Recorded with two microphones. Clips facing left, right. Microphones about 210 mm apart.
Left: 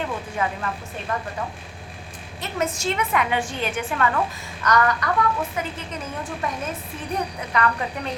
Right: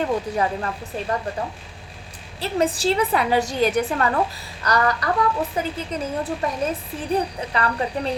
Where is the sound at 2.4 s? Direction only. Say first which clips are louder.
Right 5 dB; 35° right (ahead or behind).